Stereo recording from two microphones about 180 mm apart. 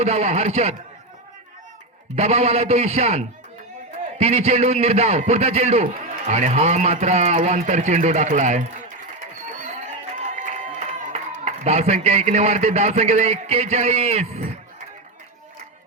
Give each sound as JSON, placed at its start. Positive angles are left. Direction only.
{"t": 0.0, "sound": "a man's voice", "side_deg": -35}
{"t": 2.1, "sound": "a man's voice", "side_deg": -35}
{"t": 10.2, "sound": "a man's voice", "side_deg": -45}